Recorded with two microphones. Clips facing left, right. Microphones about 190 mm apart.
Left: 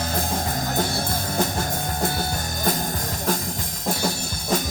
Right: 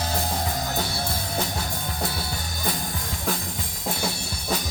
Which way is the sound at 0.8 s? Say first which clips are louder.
Left 4 dB; 45° left (ahead or behind).